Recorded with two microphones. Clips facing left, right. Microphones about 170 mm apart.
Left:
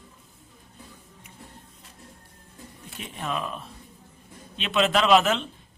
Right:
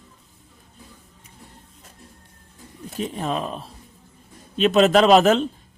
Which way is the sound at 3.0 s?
35° right (ahead or behind).